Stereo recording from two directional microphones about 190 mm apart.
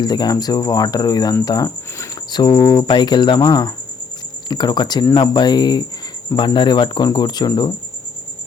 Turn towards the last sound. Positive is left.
turn(degrees=20)  # may be behind; listen again after turning